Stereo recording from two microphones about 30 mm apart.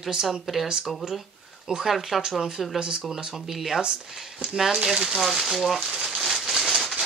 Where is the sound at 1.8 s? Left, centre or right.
Centre.